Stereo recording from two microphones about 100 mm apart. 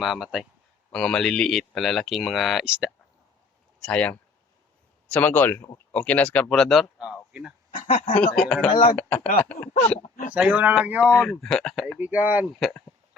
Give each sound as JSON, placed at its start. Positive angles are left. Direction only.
{"t": 0.0, "sound": "speech", "side_deg": -5}
{"t": 0.9, "sound": "speech", "side_deg": 5}
{"t": 2.6, "sound": "speech", "side_deg": -10}
{"t": 3.8, "sound": "speech", "side_deg": 10}
{"t": 7.0, "sound": "speech", "side_deg": -5}
{"t": 8.2, "sound": "speech", "side_deg": 10}
{"t": 8.6, "sound": "speech", "side_deg": 70}
{"t": 9.0, "sound": "speech", "side_deg": 15}
{"t": 10.3, "sound": "speech", "side_deg": -15}
{"t": 11.2, "sound": "speech", "side_deg": 5}
{"t": 11.9, "sound": "speech", "side_deg": -15}
{"t": 12.5, "sound": "speech", "side_deg": 0}